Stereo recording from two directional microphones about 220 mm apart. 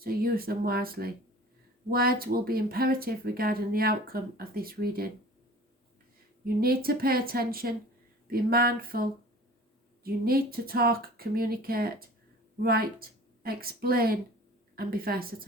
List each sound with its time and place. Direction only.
0.0 s speech: 40° right (ahead or behind)
6.4 s a woman's voice: 45° right (ahead or behind)